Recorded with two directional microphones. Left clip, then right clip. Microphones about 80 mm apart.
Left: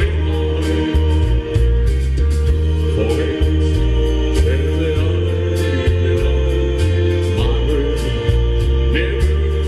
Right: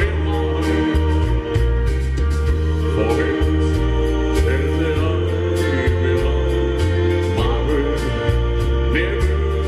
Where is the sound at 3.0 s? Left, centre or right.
Right.